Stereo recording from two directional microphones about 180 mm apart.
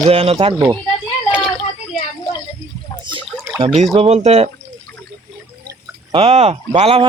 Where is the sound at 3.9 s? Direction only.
35° right (ahead or behind).